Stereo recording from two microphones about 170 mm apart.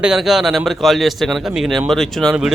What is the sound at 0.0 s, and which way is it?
A man's voice, centre (ahead or behind).